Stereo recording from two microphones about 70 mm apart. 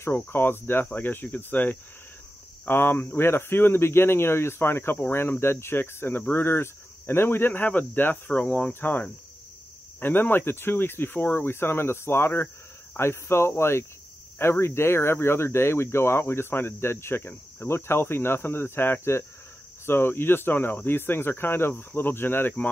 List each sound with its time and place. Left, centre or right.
0.3 s speech: left